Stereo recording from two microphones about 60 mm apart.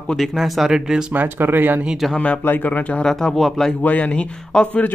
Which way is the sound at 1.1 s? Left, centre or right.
Right.